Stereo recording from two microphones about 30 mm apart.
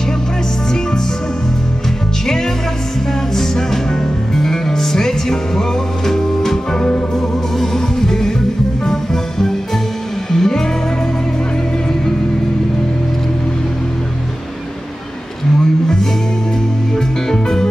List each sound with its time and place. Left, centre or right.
3.3 s music: centre
17.3 s music: centre